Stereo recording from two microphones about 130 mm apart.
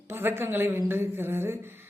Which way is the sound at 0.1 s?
15° right (ahead or behind).